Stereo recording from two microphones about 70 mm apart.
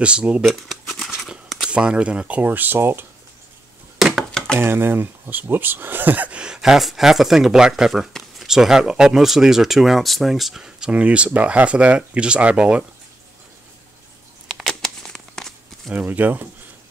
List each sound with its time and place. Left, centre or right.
0.0 s speech: centre
0.5 s shuffling cards: centre
1.1 s a sound: centre
1.7 s speech: centre; by 3.1 s right
4.0 s a sound: centre
4.3 s a sound: centre
4.6 s speech: right; by 12.8 s centre
14.5 s crumpling: centre
15.9 s speech: right